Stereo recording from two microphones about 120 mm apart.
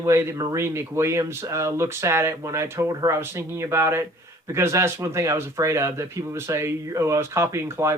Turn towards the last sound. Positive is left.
turn(degrees=-20)  # may be behind; listen again after turning